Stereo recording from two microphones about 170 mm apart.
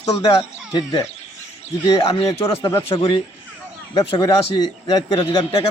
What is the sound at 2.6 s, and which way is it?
A man's voice, 20° left (ahead or behind).